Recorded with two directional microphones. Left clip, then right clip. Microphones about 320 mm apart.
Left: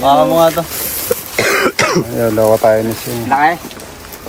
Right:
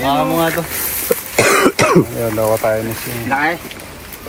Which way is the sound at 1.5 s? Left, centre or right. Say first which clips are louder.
Right 1 dB; right.